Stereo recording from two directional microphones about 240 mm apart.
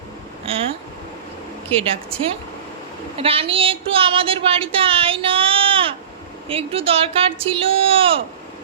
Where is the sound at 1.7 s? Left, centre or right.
Right.